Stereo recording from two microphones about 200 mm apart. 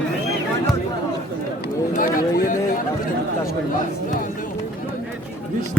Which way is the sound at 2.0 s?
40° left (ahead or behind).